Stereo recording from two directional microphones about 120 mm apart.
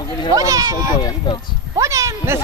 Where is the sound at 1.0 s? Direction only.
40° left (ahead or behind).